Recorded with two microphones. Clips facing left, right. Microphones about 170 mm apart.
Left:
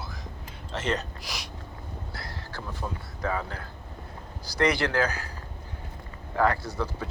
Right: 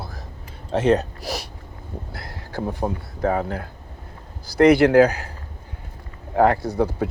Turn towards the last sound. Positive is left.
turn(degrees=-60)  # may be behind; listen again after turning